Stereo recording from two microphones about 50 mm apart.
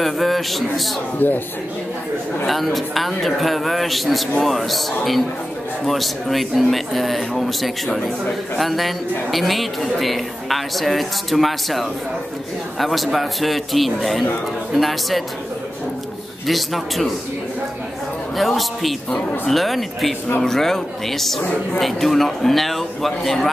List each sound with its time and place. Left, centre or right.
0.0 s a man's voice: centre
1.2 s speech: left
2.4 s speech: centre
16.4 s speech: centre
18.3 s speech: centre